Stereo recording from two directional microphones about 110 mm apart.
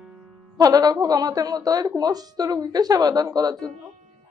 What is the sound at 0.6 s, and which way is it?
Speech, 35° right (ahead or behind).